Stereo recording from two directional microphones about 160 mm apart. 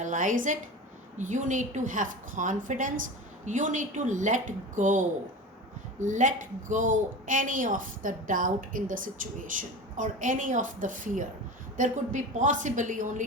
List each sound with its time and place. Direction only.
0.0 s a woman's voice: 55° right (ahead or behind)